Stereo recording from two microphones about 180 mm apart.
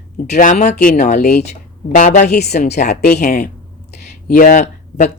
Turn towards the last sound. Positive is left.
turn(degrees=40)  # may be behind; listen again after turning